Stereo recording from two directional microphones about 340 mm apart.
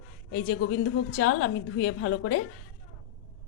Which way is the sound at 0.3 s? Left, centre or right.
Left.